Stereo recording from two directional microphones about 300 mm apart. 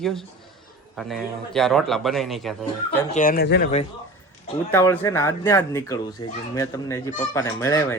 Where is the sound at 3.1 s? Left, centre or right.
Left.